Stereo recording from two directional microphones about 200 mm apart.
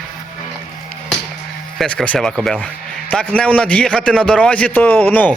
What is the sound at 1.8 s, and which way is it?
A man's voice, 5° left (ahead or behind).